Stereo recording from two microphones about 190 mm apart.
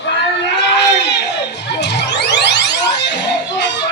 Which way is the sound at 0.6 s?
65° left (ahead or behind).